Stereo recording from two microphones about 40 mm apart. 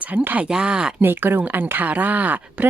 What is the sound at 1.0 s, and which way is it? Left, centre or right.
A woman's voice, right.